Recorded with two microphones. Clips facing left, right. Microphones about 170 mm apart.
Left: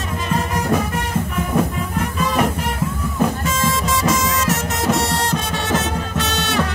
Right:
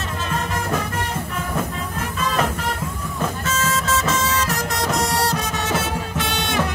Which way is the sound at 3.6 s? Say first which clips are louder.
Right 1 dB; 10° left (ahead or behind).